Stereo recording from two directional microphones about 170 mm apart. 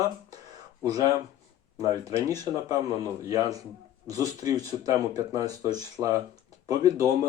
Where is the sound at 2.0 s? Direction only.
20° right (ahead or behind).